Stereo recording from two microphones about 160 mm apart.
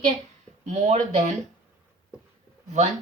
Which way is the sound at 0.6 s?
45° right (ahead or behind).